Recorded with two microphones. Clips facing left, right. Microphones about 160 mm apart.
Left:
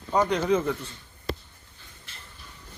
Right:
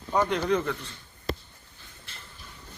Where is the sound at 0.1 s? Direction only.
Centre (ahead or behind).